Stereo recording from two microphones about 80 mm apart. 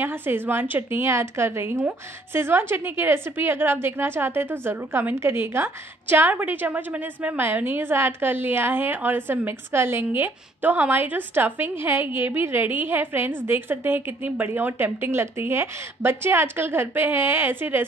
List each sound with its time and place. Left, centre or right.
0.0 s a woman's voice: right